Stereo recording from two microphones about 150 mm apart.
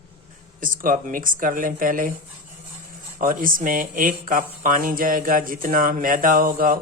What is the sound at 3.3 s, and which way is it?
Speech, 65° right (ahead or behind).